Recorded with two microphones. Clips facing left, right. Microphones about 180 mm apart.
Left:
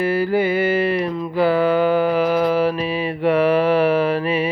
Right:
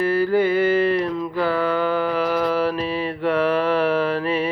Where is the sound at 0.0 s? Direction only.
10° left (ahead or behind).